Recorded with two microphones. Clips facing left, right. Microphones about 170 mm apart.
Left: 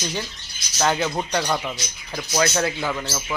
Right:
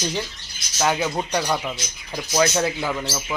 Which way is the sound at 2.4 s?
15° right (ahead or behind).